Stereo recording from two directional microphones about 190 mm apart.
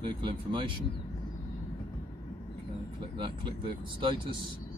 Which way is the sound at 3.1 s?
25° right (ahead or behind).